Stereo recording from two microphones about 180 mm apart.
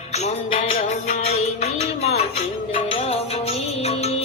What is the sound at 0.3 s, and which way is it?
Music, 35° left (ahead or behind).